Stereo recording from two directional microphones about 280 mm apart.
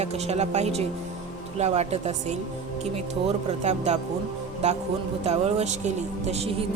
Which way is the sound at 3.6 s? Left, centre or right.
Right.